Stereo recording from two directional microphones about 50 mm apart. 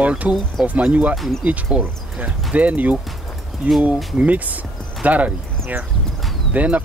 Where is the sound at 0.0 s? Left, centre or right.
Right.